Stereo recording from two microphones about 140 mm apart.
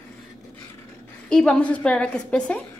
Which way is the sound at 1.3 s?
5° left (ahead or behind).